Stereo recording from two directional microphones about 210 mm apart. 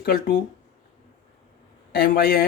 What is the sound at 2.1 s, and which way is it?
Speech, 45° left (ahead or behind).